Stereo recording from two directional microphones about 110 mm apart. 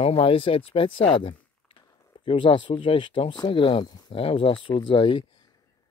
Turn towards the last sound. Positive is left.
turn(degrees=50)  # may be behind; listen again after turning